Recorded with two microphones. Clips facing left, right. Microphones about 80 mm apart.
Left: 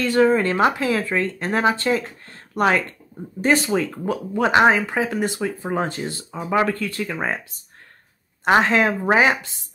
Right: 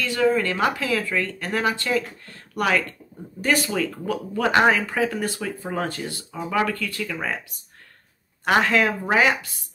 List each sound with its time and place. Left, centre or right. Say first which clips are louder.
0.0 s speech: left 4 dB; left